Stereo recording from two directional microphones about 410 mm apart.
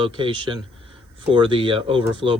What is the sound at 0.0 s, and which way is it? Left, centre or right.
Speech, centre.